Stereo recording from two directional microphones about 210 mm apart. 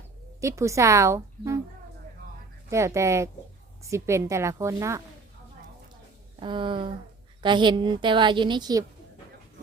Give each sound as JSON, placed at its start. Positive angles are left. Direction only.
{"t": 0.4, "sound": "speech", "side_deg": -15}
{"t": 2.6, "sound": "speech", "side_deg": -15}
{"t": 6.4, "sound": "a woman's voice", "side_deg": -25}